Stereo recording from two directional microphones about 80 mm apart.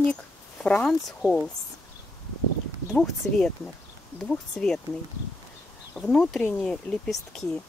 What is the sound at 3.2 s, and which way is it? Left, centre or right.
Speech, left.